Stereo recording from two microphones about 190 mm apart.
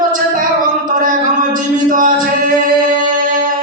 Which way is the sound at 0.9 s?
45° right (ahead or behind).